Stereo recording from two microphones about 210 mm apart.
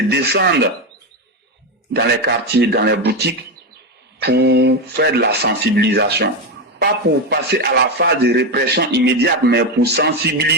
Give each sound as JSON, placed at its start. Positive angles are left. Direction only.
{"t": 0.1, "sound": "a man's voice", "side_deg": -55}
{"t": 1.9, "sound": "a man's voice", "side_deg": -50}